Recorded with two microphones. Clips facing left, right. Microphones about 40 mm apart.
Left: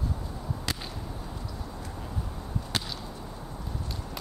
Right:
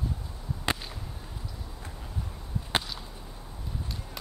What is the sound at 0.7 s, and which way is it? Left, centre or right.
Whip, right.